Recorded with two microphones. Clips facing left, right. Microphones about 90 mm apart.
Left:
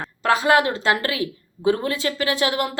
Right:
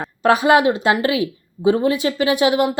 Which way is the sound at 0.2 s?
20° right (ahead or behind).